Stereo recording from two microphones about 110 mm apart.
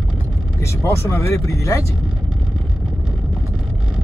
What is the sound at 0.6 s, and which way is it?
Speech, 25° left (ahead or behind).